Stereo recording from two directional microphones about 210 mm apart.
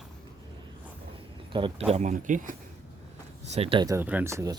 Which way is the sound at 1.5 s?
25° right (ahead or behind).